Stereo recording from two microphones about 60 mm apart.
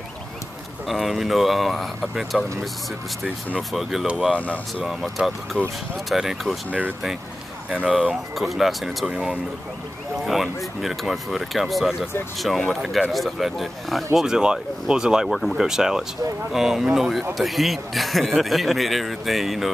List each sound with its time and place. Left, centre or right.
0.8 s speech: centre
3.7 s speech: centre
4.4 s speech: left
5.1 s speech: centre
7.7 s speech: centre
8.4 s speech: centre
10.2 s speech: centre
14.1 s speech: centre
15.2 s speech: centre
15.6 s speech: centre